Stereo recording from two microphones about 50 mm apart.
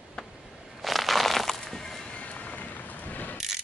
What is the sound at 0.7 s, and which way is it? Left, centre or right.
Music, centre.